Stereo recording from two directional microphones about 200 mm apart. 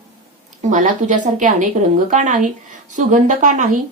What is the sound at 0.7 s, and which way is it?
Speech, 40° right (ahead or behind).